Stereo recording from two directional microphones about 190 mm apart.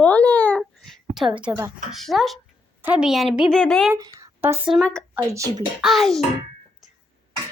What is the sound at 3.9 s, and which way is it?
Speech, 15° right (ahead or behind).